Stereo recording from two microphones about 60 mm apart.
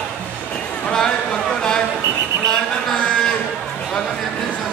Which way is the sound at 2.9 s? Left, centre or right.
Centre.